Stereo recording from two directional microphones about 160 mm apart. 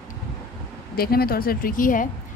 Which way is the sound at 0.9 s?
70° left (ahead or behind).